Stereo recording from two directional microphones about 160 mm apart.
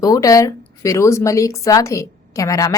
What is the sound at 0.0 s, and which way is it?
Speech, 20° left (ahead or behind).